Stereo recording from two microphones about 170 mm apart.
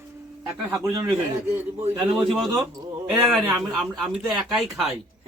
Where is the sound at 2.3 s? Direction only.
Centre (ahead or behind).